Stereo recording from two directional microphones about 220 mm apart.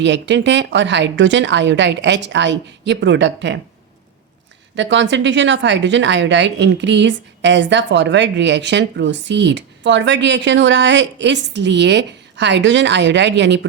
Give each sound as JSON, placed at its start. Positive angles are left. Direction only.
{"t": 0.0, "sound": "speech", "side_deg": -55}
{"t": 4.7, "sound": "speech", "side_deg": -55}